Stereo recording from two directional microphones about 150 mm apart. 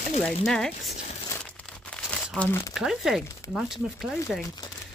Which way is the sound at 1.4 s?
5° left (ahead or behind).